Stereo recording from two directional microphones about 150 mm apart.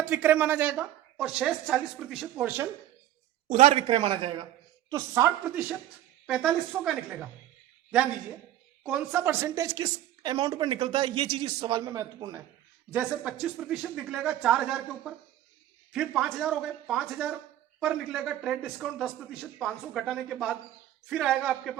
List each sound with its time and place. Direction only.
0.0 s a woman's voice: 10° right (ahead or behind)
2.3 s a woman's voice: 15° right (ahead or behind)
3.5 s speech: 45° right (ahead or behind)
4.9 s a woman's voice: 20° right (ahead or behind)
6.2 s a man's voice: 5° right (ahead or behind); by 12.4 s 20° right (ahead or behind)
12.9 s a man's voice: 10° right (ahead or behind)